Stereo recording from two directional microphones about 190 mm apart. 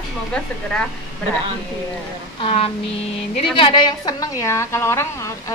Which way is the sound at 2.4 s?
30° left (ahead or behind).